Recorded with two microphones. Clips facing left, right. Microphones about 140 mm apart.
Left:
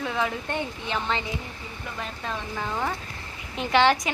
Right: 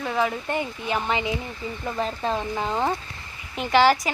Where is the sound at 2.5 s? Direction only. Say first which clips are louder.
Right 4 dB; 20° right (ahead or behind).